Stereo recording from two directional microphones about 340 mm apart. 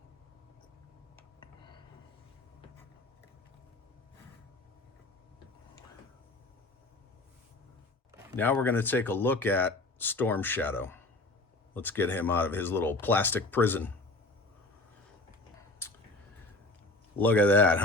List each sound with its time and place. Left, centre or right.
1.1 s a sound: centre
8.4 s speech: centre
17.2 s speech: centre